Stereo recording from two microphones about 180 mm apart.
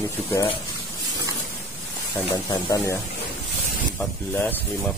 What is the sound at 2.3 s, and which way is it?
Speech, 20° left (ahead or behind).